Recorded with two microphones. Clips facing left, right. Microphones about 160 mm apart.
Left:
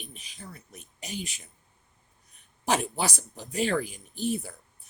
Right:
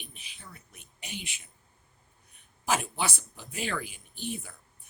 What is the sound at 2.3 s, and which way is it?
A woman's voice, 40° left (ahead or behind).